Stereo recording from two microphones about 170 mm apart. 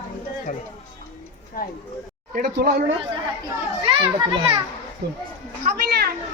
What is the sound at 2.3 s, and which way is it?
Speech, 60° right (ahead or behind).